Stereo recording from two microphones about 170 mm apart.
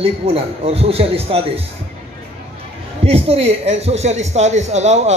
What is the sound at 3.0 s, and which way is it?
A man's voice, 35° right (ahead or behind).